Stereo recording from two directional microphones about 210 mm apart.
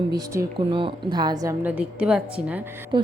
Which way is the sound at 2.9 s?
20° right (ahead or behind).